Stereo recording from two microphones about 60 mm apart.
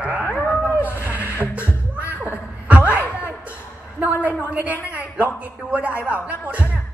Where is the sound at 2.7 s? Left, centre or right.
Right.